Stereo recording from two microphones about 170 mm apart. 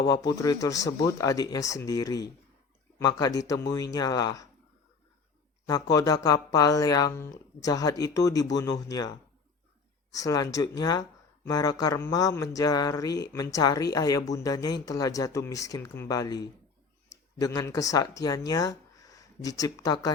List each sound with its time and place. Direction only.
0.0 s speech: 20° left (ahead or behind)
5.6 s speech: 20° left (ahead or behind)